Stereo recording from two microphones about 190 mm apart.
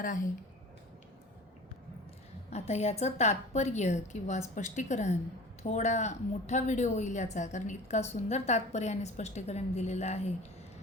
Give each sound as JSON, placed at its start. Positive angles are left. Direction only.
{"t": 2.5, "sound": "a woman's voice", "side_deg": 35}